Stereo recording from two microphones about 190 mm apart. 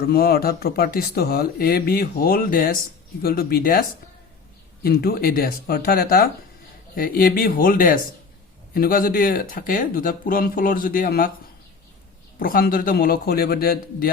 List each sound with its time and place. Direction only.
0.1 s speech: 55° left (ahead or behind)
12.4 s speech: 50° left (ahead or behind)